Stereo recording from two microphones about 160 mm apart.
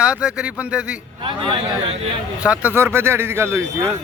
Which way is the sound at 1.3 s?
35° right (ahead or behind).